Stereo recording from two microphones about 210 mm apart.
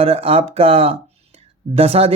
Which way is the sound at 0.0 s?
25° right (ahead or behind).